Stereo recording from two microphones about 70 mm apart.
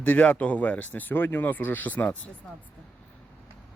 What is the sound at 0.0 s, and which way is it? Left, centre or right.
Speech, left.